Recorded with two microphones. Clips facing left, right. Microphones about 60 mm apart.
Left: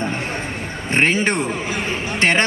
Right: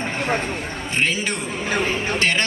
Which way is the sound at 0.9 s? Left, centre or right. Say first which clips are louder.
Left 5 dB; left.